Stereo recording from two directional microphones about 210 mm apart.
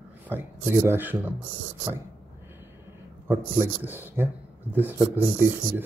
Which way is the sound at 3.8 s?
10° right (ahead or behind).